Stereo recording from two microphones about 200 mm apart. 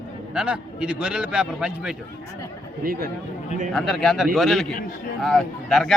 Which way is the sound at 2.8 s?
45° right (ahead or behind).